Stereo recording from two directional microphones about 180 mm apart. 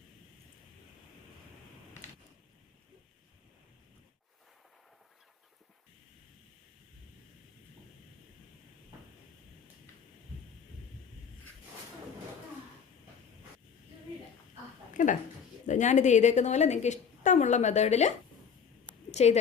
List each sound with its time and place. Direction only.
14.9 s a woman's voice: 45° left (ahead or behind)
19.1 s speech: 40° left (ahead or behind)